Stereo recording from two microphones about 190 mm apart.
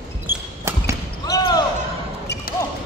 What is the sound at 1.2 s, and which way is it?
Basketball bounce, 20° left (ahead or behind).